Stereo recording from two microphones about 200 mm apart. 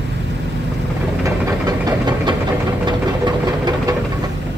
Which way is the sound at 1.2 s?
20° right (ahead or behind).